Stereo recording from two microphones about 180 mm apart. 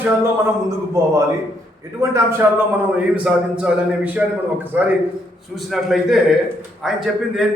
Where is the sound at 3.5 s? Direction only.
5° right (ahead or behind).